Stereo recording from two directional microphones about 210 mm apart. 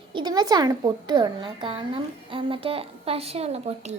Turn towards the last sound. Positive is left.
turn(degrees=-30)  # may be behind; listen again after turning